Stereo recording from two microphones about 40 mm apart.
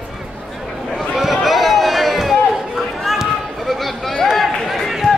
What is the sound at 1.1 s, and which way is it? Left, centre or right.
Run, centre.